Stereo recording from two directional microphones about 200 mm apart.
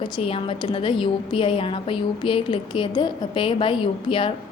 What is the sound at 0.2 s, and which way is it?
A woman's voice, 30° left (ahead or behind).